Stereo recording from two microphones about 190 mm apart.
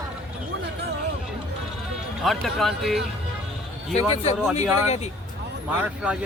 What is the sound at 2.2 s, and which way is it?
Speech, centre (ahead or behind).